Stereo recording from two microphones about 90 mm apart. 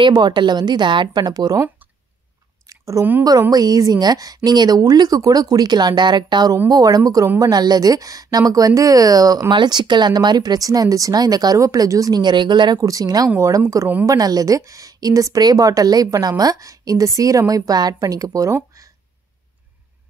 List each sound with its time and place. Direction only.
0.0 s a woman's voice: 55° right (ahead or behind)
2.7 s a sound: 40° right (ahead or behind)
3.3 s a woman's voice: 45° right (ahead or behind)
9.5 s a woman's voice: 55° right (ahead or behind)
12.7 s a woman's voice: 40° right (ahead or behind)